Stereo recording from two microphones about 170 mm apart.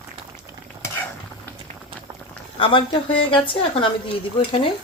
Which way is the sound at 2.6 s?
30° left (ahead or behind).